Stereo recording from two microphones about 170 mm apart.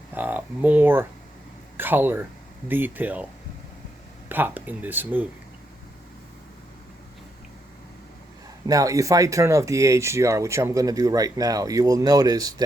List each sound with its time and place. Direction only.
0.1 s speech: 10° right (ahead or behind)
4.3 s speech: 10° right (ahead or behind)
8.6 s speech: 20° right (ahead or behind)